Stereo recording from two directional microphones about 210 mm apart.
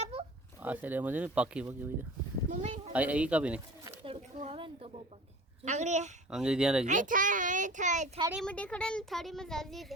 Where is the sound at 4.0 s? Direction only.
30° right (ahead or behind).